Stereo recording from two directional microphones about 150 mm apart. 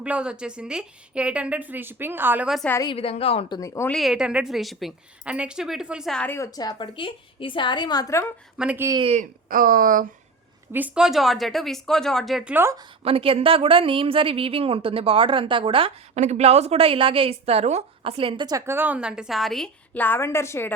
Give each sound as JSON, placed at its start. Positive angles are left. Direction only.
{"t": 0.0, "sound": "a woman's voice", "side_deg": -5}
{"t": 2.8, "sound": "a woman's voice", "side_deg": 40}
{"t": 3.6, "sound": "a woman's voice", "side_deg": 20}
{"t": 3.8, "sound": "a woman's voice", "side_deg": 0}
{"t": 6.2, "sound": "a woman's voice", "side_deg": 20}
{"t": 8.5, "sound": "a woman's voice", "side_deg": -10}
{"t": 9.5, "sound": "speech", "side_deg": -70}
{"t": 10.7, "sound": "a woman's voice", "side_deg": -10}
{"t": 12.5, "sound": "a woman's voice", "side_deg": -20}
{"t": 13.1, "sound": "a woman's voice", "side_deg": -40}